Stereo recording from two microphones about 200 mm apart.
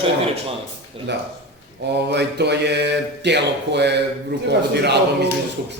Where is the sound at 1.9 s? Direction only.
55° right (ahead or behind).